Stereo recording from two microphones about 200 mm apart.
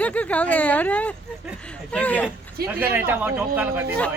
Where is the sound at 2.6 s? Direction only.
50° right (ahead or behind).